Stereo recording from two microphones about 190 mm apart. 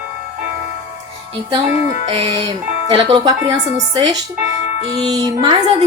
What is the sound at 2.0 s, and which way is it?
A woman's voice, 30° right (ahead or behind).